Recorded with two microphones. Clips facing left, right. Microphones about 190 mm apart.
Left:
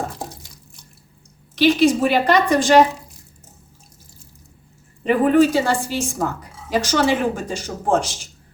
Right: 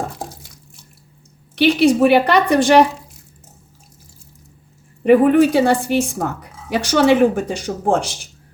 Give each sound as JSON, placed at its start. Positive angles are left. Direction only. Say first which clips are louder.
{"t": 1.5, "sound": "speech", "louder": "right 2 dB", "side_deg": -60}
{"t": 5.0, "sound": "speech", "louder": "right 4 dB", "side_deg": -60}